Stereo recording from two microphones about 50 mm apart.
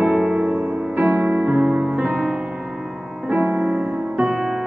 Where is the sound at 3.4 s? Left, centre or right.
Right.